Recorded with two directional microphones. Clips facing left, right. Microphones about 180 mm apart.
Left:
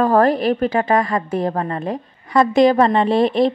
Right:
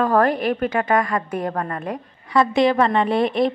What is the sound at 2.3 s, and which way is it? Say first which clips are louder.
Speech: left 4 dB; 40° left (ahead or behind).